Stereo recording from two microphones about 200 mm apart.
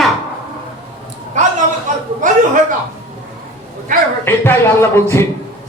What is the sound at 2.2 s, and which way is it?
Speech, 40° right (ahead or behind).